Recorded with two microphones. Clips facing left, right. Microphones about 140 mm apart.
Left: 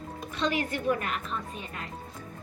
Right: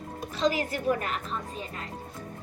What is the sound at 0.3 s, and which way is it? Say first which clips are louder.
A woman's voice: right 2 dB; 35° right (ahead or behind).